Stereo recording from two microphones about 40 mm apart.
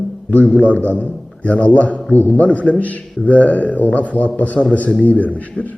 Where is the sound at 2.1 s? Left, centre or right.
Left.